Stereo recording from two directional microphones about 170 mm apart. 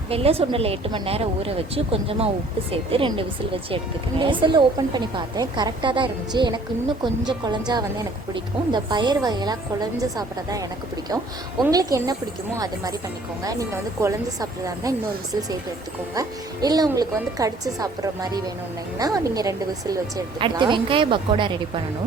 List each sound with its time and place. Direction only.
0.1 s a woman's voice: 35° right (ahead or behind)
8.7 s a woman's voice: 25° right (ahead or behind)